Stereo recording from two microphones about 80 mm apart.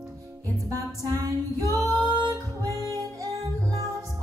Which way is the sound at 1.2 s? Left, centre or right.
Right.